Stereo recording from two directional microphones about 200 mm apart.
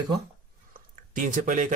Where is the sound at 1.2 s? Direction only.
40° right (ahead or behind).